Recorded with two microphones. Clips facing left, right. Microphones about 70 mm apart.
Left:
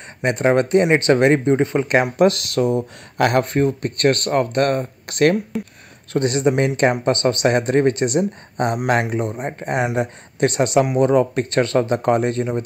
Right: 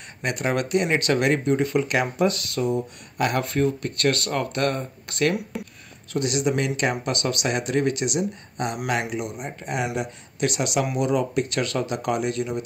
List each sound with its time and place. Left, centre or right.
0.2 s speech: left
2.1 s speech: left
3.4 s speech: left
6.1 s speech: left